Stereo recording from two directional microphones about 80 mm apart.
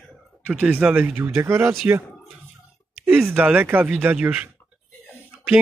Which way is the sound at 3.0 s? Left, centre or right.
Right.